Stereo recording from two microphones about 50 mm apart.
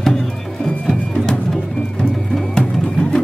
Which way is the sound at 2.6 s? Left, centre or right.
Centre.